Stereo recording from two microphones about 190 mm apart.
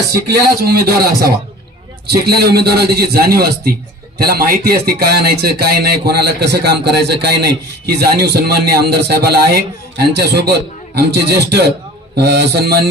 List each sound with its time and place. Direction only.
0.6 s a man's voice: 55° right (ahead or behind)
2.0 s speech: 55° right (ahead or behind)